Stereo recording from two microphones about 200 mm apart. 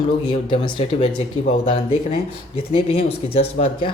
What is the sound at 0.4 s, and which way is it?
Speech, 25° left (ahead or behind).